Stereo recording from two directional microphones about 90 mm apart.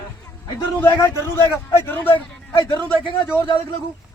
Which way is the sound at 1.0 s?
30° left (ahead or behind).